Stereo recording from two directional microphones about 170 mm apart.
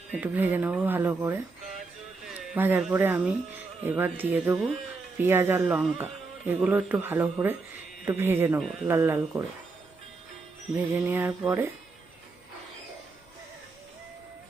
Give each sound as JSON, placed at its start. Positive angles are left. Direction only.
{"t": 0.1, "sound": "speech", "side_deg": -10}
{"t": 10.9, "sound": "speech", "side_deg": -15}